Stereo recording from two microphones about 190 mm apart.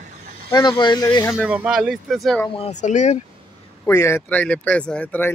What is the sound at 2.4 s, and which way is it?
Speech, 30° left (ahead or behind).